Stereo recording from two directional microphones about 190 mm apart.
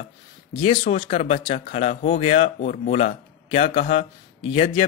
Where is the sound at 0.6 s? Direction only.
30° left (ahead or behind).